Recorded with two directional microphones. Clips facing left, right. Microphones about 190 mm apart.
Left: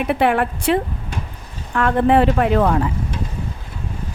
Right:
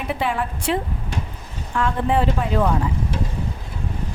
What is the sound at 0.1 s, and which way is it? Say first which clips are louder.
A woman's voice: left 6 dB; 65° left (ahead or behind).